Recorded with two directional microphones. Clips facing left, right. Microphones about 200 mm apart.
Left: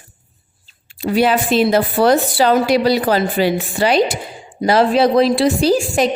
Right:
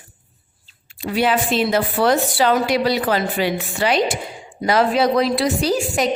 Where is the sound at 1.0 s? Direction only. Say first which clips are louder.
Left 4 dB; 40° left (ahead or behind).